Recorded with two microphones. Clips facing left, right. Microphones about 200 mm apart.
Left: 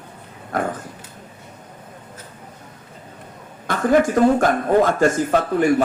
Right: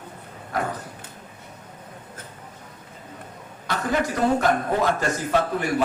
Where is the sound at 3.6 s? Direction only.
50° left (ahead or behind).